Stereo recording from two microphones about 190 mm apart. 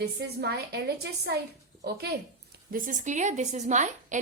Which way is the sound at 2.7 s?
45° right (ahead or behind).